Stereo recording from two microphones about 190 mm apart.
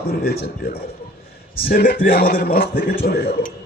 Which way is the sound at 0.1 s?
55° left (ahead or behind).